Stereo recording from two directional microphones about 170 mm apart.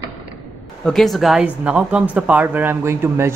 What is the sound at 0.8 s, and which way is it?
A man's voice, centre (ahead or behind).